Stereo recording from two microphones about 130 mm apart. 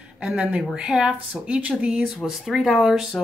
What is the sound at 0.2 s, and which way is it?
Speech, 10° right (ahead or behind).